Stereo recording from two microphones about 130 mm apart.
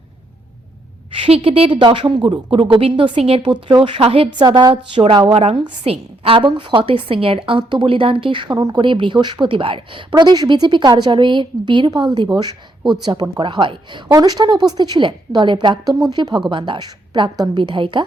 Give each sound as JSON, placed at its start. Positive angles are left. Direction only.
{"t": 1.1, "sound": "a woman's voice", "side_deg": -45}
{"t": 3.4, "sound": "a woman's voice", "side_deg": -35}
{"t": 4.4, "sound": "a woman's voice", "side_deg": -35}